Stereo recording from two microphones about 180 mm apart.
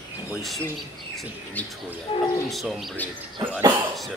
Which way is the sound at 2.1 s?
30° left (ahead or behind).